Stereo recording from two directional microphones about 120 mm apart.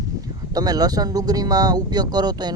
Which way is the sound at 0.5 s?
35° right (ahead or behind).